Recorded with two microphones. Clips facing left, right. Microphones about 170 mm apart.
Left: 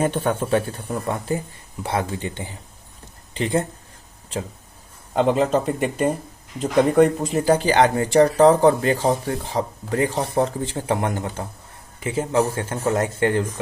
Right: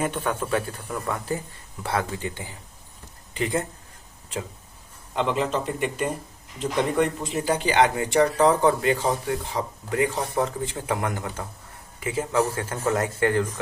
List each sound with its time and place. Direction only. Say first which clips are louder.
0.0 s speech: left 5 dB; 30° left (ahead or behind)
5.1 s speech: left 6 dB; 40° left (ahead or behind); by 13.4 s 25° left (ahead or behind)